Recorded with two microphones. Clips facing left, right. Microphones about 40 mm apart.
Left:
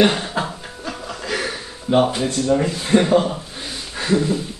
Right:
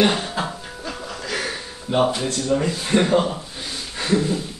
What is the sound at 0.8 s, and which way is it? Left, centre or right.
Music, centre.